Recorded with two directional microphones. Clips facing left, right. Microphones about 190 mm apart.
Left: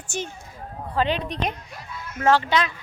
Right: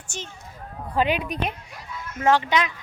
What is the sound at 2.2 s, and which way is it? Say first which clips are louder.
Speech: left 1 dB; 15° right (ahead or behind).